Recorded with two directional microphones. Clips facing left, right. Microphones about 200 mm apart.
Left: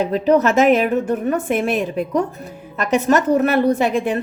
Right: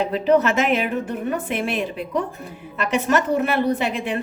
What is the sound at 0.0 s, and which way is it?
A woman's voice, 40° left (ahead or behind).